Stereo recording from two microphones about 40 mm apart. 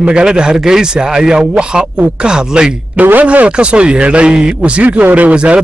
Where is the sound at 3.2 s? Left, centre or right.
Right.